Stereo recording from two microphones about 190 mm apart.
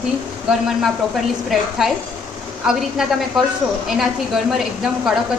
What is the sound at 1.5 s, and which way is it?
A woman's voice, centre (ahead or behind).